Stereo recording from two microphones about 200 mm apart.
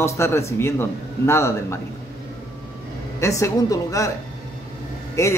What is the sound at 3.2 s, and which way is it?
Speech, 15° left (ahead or behind).